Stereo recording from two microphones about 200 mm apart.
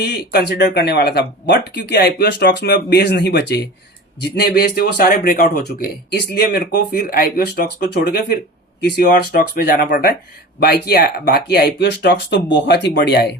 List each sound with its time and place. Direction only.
0.0 s speech: 55° left (ahead or behind)